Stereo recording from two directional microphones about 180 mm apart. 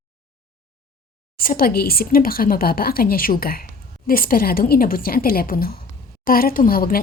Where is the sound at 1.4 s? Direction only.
50° left (ahead or behind).